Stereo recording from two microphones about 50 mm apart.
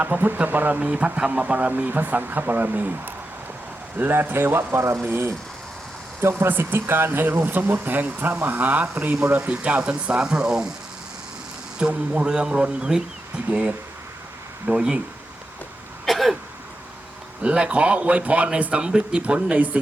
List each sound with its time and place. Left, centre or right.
0.0 s speech: right
0.8 s a man's voice: right
3.9 s speech: right
6.5 s a man's voice: right; by 10.7 s centre
11.8 s a man's voice: right
16.0 s throat clearing: centre
17.4 s a man's voice: right